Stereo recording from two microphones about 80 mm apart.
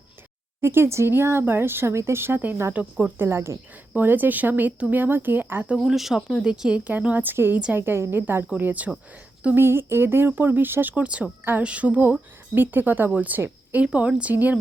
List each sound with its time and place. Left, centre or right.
0.6 s speech: right
5.8 s speech: centre; by 8.4 s right
8.5 s speech: centre
9.6 s speech: right